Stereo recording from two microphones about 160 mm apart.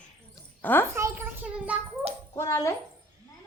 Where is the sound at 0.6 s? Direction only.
15° left (ahead or behind).